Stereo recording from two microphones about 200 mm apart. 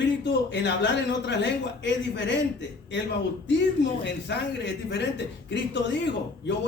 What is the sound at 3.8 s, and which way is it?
Speech, 60° left (ahead or behind).